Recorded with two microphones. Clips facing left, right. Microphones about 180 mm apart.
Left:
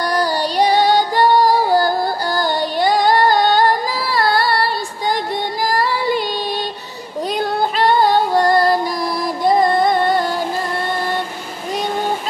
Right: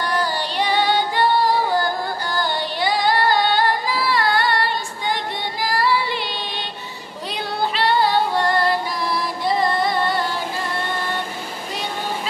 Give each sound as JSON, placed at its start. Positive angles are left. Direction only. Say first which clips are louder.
{"t": 0.0, "sound": "music", "louder": "left 5 dB", "side_deg": 40}
{"t": 7.2, "sound": "female singing", "louder": "left 5 dB", "side_deg": 45}